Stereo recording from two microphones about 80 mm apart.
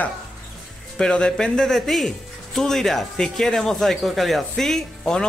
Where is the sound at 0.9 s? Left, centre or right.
Centre.